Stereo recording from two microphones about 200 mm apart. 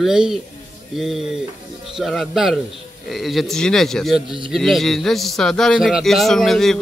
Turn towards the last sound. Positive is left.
turn(degrees=0)  # may be behind; listen again after turning